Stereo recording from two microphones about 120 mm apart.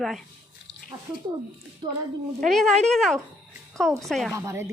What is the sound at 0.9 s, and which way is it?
Speech, 30° right (ahead or behind).